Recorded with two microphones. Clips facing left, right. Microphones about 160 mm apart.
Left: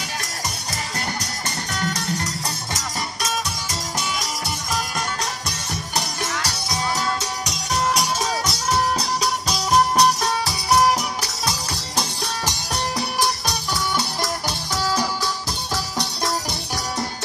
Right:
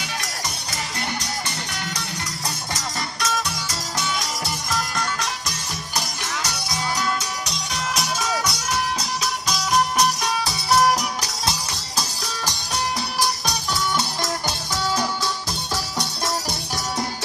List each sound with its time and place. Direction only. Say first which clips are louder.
1.8 s music: left 5 dB; 45° left (ahead or behind)
7.4 s music: left 5 dB; 40° left (ahead or behind)
9.5 s music: left 2 dB; 35° left (ahead or behind)